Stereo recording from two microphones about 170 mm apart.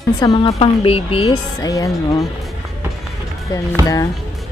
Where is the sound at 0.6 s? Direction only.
35° left (ahead or behind).